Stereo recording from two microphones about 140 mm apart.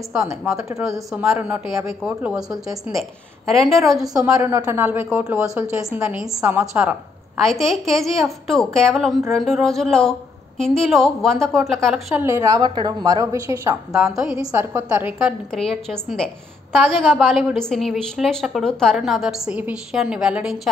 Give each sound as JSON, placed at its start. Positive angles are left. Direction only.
{"t": 0.2, "sound": "a woman's voice", "side_deg": -20}
{"t": 1.1, "sound": "a man's voice", "side_deg": -10}
{"t": 4.2, "sound": "a man's voice", "side_deg": -20}
{"t": 5.9, "sound": "a man's voice", "side_deg": -10}
{"t": 12.1, "sound": "a woman's voice", "side_deg": -20}
{"t": 14.1, "sound": "a woman's voice", "side_deg": -5}
{"t": 14.5, "sound": "a man's voice", "side_deg": -15}
{"t": 15.5, "sound": "a woman's voice", "side_deg": 5}